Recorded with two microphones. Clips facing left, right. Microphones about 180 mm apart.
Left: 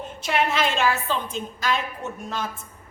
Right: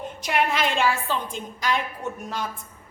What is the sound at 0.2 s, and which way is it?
A woman's voice, 15° right (ahead or behind).